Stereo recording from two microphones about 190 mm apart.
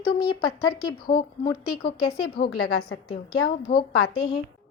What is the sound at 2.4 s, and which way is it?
Speech, 55° left (ahead or behind).